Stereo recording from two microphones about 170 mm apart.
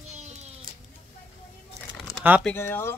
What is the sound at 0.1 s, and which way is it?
Music, 40° right (ahead or behind).